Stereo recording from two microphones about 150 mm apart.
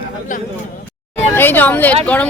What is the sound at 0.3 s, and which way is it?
Speech, 60° left (ahead or behind).